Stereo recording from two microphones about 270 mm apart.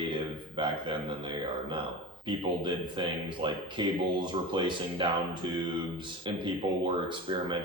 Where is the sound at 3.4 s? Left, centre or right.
Centre.